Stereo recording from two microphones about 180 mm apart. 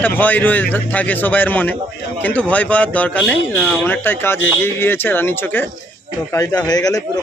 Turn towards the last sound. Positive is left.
turn(degrees=20)  # may be behind; listen again after turning